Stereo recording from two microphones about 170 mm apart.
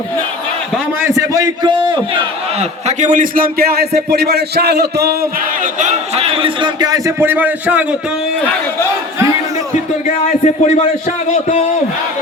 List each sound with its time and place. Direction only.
1.0 s a sound: 20° right (ahead or behind)
2.6 s a man's voice: 45° right (ahead or behind); by 5.1 s 70° right (ahead or behind)
5.8 s a man's voice: 35° right (ahead or behind); by 7.9 s 10° right (ahead or behind)
10.1 s speech: 45° left (ahead or behind)